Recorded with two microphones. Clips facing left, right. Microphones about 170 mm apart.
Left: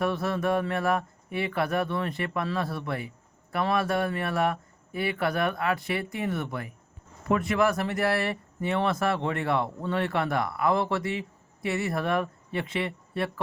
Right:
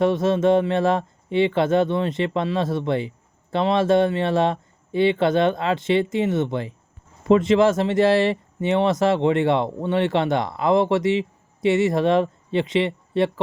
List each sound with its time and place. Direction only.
0.0 s speech: 20° right (ahead or behind)